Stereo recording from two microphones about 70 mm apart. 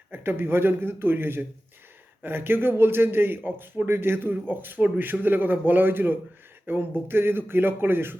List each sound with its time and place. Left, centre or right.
0.1 s a man's voice: right